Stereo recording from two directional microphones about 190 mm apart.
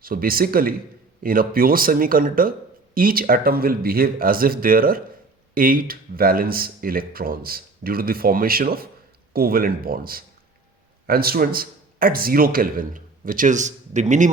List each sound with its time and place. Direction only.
0.0 s speech: 50° right (ahead or behind)